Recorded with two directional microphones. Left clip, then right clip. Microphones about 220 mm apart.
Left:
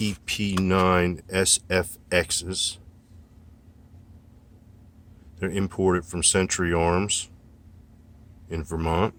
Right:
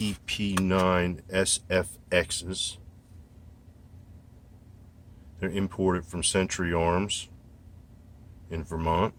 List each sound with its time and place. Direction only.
0.0 s a sound: 55° left (ahead or behind)
0.6 s speech: 55° left (ahead or behind)
5.4 s speech: 50° left (ahead or behind)
8.4 s speech: 50° left (ahead or behind)